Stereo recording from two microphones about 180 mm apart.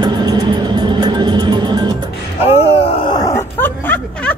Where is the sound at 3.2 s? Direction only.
15° left (ahead or behind).